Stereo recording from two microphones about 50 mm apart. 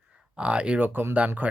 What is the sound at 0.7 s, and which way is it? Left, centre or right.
Speech, right.